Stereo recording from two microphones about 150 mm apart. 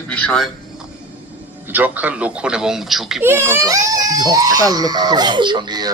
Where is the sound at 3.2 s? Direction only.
15° right (ahead or behind).